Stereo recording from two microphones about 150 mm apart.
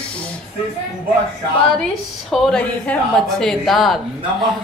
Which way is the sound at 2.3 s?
5° left (ahead or behind).